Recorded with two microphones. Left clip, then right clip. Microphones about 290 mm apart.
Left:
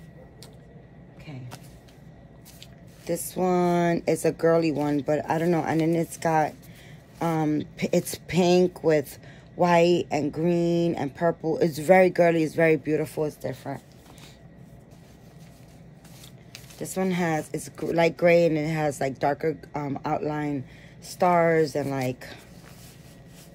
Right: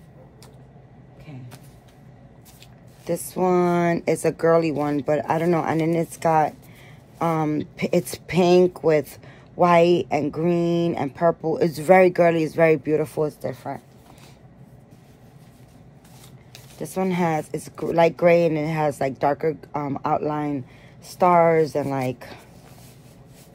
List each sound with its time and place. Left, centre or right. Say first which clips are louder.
3.1 s speech: right 4 dB; right
16.8 s speech: right 4 dB; right